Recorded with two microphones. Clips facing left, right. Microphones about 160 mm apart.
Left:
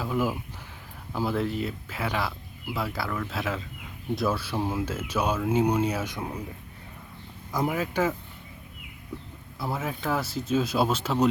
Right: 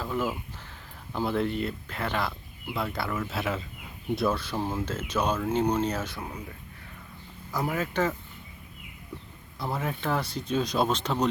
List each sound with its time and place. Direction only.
0.0 s speech: 10° left (ahead or behind)
7.7 s speech: 10° left (ahead or behind)
9.6 s speech: 5° left (ahead or behind)